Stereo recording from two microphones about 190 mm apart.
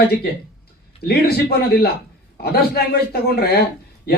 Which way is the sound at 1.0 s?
55° left (ahead or behind).